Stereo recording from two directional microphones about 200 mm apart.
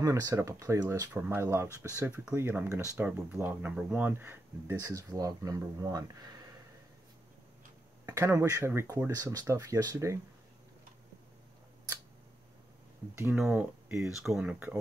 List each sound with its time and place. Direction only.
0.0 s speech: 15° right (ahead or behind)
8.0 s speech: 15° right (ahead or behind)
13.2 s speech: 5° right (ahead or behind)